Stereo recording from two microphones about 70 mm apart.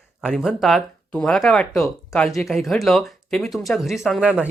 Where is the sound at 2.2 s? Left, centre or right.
Centre.